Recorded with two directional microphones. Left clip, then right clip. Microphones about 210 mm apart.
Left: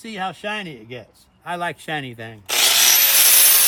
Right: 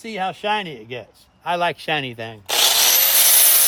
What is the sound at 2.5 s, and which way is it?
Power tool, centre (ahead or behind).